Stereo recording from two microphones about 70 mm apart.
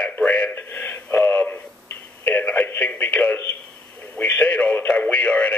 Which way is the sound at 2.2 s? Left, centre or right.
Left.